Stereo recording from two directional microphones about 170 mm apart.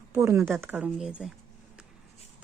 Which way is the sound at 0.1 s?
15° right (ahead or behind).